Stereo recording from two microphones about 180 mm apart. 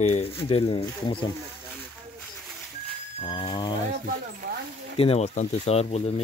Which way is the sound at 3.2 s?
25° left (ahead or behind).